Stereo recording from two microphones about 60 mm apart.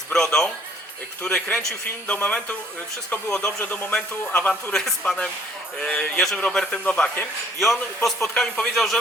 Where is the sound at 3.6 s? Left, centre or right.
Left.